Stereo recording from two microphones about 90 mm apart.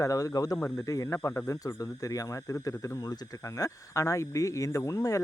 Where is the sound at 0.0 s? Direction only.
40° left (ahead or behind).